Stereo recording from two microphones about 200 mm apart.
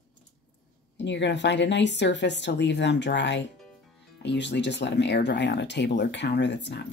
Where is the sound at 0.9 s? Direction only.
60° left (ahead or behind).